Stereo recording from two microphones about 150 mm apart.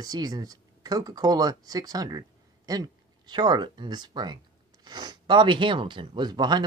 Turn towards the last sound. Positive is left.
turn(degrees=-30)  # may be behind; listen again after turning